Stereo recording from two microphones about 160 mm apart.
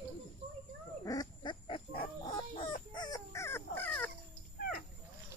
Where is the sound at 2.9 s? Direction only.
25° left (ahead or behind).